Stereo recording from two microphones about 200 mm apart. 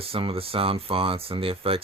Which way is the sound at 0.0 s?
30° right (ahead or behind).